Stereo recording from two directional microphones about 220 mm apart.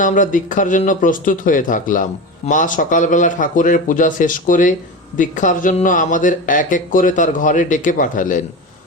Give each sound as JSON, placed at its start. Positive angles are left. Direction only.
{"t": 0.0, "sound": "speech", "side_deg": 35}